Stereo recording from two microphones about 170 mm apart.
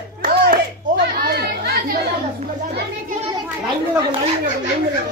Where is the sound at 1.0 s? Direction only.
70° right (ahead or behind).